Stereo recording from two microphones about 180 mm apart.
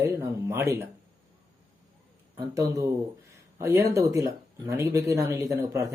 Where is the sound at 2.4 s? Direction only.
20° right (ahead or behind).